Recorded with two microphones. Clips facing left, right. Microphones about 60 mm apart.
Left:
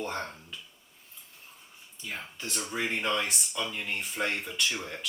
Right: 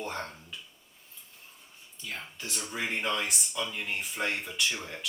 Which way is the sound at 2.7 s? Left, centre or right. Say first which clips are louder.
Left 2 dB; centre.